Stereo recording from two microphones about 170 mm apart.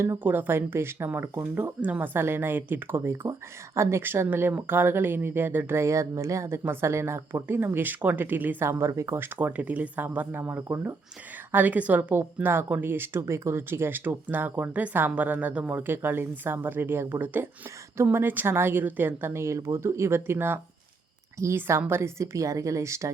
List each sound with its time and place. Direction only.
0.0 s speech: 15° right (ahead or behind)